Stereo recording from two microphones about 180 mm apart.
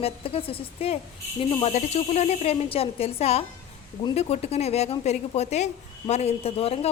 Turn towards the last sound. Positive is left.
turn(degrees=35)  # may be behind; listen again after turning